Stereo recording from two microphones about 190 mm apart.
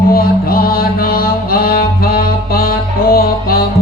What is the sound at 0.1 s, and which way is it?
Music, 50° left (ahead or behind).